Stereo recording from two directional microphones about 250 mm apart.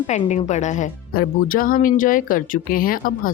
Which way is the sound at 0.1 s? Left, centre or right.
Left.